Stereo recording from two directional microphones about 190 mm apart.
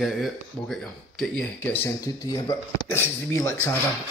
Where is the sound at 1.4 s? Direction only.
10° left (ahead or behind).